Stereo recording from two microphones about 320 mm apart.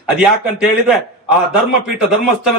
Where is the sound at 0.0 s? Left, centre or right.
Centre.